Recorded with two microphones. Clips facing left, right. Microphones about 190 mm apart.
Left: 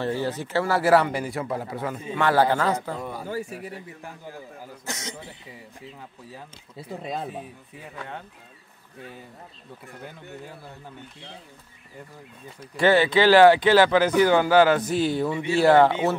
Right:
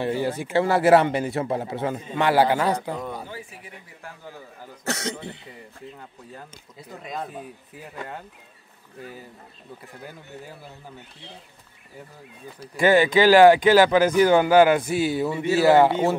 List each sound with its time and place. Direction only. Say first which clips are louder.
0.0 s speech: right 2 dB; 15° right (ahead or behind)
3.3 s speech: left 8 dB; 45° left (ahead or behind)
4.8 s speech: right 8 dB; 70° right (ahead or behind)
7.0 s speech: left 1 dB; 30° left (ahead or behind)
7.2 s speech: left 1 dB; centre (ahead or behind)
12.7 s a man's voice: right 1 dB; 10° right (ahead or behind)